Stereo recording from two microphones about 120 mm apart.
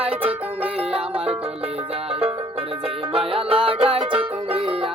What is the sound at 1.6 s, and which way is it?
Music, 55° right (ahead or behind).